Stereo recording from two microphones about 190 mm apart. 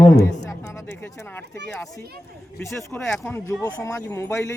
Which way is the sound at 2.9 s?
10° left (ahead or behind).